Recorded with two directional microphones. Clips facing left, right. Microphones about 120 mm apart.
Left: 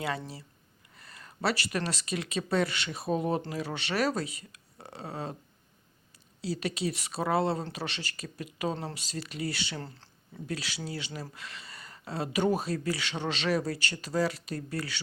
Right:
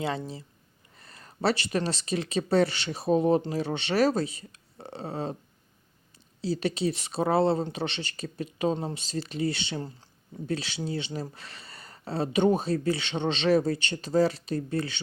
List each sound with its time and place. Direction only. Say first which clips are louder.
0.2 s speech: right 5 dB; 20° right (ahead or behind)
0.9 s speech: right 3 dB; 35° right (ahead or behind)
6.4 s speech: right 4 dB; 30° right (ahead or behind)